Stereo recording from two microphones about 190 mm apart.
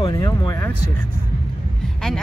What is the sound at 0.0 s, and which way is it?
Speech, 25° left (ahead or behind).